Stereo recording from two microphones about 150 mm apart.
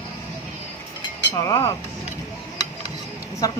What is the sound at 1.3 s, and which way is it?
Speech, 25° left (ahead or behind).